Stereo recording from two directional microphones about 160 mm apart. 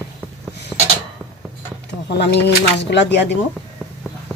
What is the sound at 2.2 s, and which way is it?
Speech, 90° left.